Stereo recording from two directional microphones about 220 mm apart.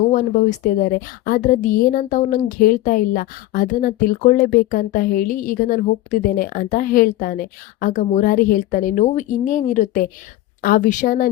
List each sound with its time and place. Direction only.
0.1 s a woman's voice: 35° left (ahead or behind)